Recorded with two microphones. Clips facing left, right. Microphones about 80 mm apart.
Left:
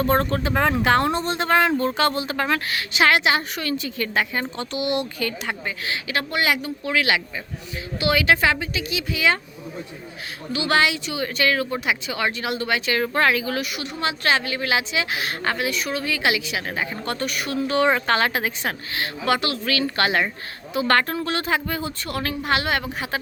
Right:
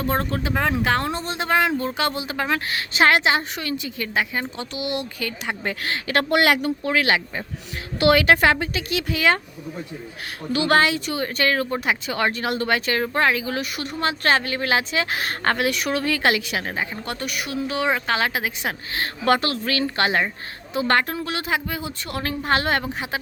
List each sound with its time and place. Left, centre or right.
0.0 s speech: centre
2.6 s a woman's voice: right; by 5.3 s centre
5.6 s speech: right
6.2 s speech: right
6.8 s speech: right
7.9 s a woman's voice: right
10.5 s a woman's voice: right
13.0 s a woman's voice: right
13.7 s a woman's voice: right
16.9 s speech: centre
18.9 s a woman's voice: right
21.1 s speech: centre; by 22.9 s right